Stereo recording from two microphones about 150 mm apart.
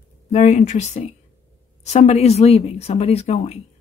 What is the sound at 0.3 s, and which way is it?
Speech, 50° left (ahead or behind).